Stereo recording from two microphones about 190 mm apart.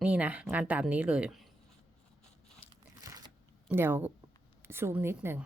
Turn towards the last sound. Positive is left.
turn(degrees=-10)  # may be behind; listen again after turning